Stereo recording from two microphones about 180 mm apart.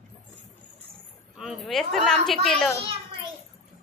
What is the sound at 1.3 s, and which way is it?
A woman's voice, centre (ahead or behind).